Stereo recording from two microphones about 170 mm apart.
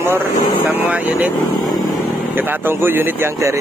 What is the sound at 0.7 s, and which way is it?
Speech, 10° right (ahead or behind).